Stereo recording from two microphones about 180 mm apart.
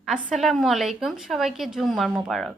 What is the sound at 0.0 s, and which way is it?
A woman's voice, centre (ahead or behind).